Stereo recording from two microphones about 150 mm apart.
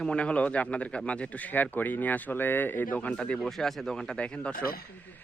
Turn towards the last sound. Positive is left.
turn(degrees=80)